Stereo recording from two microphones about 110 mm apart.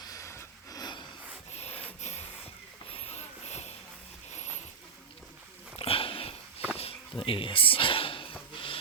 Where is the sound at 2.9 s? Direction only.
75° left (ahead or behind).